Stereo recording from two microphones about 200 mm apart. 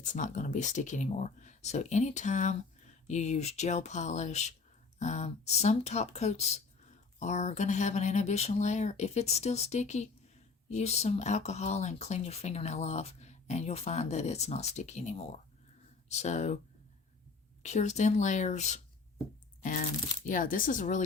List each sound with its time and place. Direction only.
0.0 s speech: 40° left (ahead or behind)
17.6 s speech: 35° left (ahead or behind)
20.2 s speech: 40° left (ahead or behind)